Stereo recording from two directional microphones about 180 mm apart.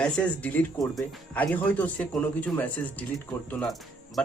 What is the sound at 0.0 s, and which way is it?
Speech, 5° left (ahead or behind).